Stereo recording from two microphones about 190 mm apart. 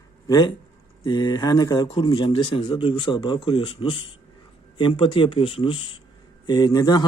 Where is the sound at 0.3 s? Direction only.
20° left (ahead or behind).